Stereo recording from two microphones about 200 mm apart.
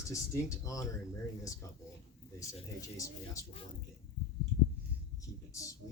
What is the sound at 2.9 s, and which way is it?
Speech, 15° left (ahead or behind).